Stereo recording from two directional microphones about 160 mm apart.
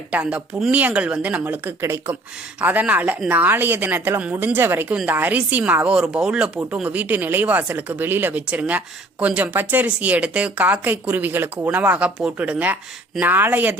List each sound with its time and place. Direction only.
0.1 s a woman's voice: 10° right (ahead or behind)